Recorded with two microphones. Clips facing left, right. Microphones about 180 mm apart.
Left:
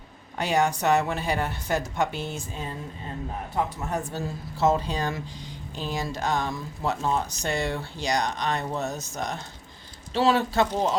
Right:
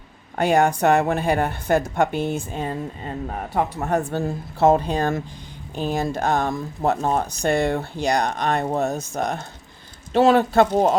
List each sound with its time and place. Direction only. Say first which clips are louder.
0.3 s speech: right 6 dB; 55° right (ahead or behind)